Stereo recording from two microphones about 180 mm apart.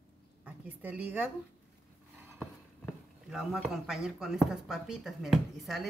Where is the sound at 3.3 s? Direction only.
Centre (ahead or behind).